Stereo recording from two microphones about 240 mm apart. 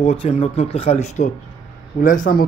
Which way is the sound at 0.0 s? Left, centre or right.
Left.